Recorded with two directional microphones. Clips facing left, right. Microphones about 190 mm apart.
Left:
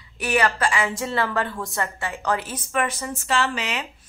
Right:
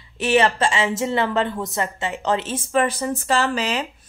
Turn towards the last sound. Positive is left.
turn(degrees=-35)  # may be behind; listen again after turning